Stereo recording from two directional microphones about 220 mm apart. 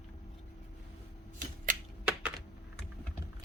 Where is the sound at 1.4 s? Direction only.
40° right (ahead or behind).